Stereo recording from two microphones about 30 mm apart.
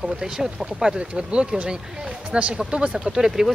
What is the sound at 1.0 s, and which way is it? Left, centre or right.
Speech, right.